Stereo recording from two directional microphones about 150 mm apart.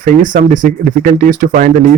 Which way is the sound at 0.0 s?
60° right (ahead or behind).